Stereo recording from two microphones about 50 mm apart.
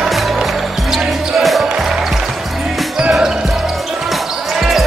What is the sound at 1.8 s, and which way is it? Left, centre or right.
Music, centre.